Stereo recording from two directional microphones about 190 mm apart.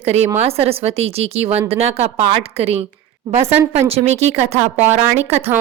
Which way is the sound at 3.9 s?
35° right (ahead or behind).